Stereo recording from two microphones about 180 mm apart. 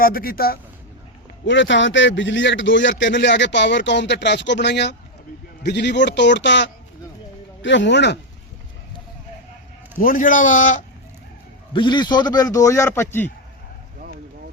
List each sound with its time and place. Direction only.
0.0 s a man's voice: 55° left (ahead or behind)
1.5 s a man's voice: 85° left
10.0 s a man's voice: 50° left (ahead or behind)
11.7 s a man's voice: 25° left (ahead or behind)